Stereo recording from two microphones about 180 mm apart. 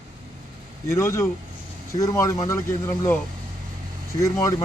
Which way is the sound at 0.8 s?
15° left (ahead or behind).